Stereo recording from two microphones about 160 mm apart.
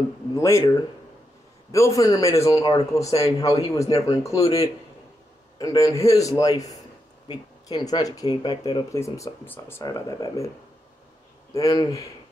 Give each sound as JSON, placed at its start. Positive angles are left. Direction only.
{"t": 0.4, "sound": "speech", "side_deg": 20}
{"t": 1.7, "sound": "speech", "side_deg": 20}
{"t": 11.5, "sound": "speech", "side_deg": 25}